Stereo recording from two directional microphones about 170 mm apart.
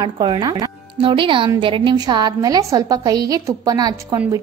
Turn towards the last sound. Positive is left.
turn(degrees=-20)  # may be behind; listen again after turning